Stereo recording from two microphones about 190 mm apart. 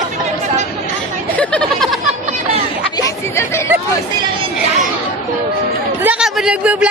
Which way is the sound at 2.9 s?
15° left (ahead or behind).